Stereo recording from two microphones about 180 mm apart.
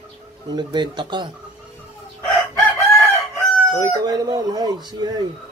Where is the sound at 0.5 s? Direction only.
25° right (ahead or behind).